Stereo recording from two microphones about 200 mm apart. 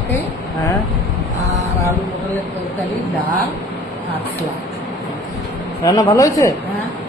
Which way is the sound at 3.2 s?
10° left (ahead or behind).